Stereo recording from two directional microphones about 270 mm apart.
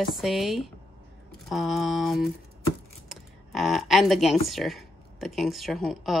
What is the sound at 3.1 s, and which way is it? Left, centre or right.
Computer keyboard, centre.